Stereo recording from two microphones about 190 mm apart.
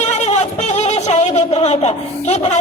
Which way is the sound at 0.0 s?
40° left (ahead or behind).